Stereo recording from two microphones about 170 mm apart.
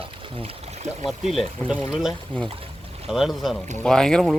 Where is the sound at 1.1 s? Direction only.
Centre (ahead or behind).